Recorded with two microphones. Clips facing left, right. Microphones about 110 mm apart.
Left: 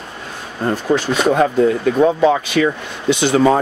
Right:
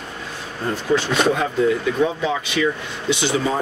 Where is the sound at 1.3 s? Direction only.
50° left (ahead or behind).